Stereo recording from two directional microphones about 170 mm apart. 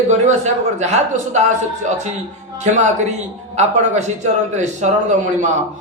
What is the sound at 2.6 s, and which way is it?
A man's voice, 40° right (ahead or behind).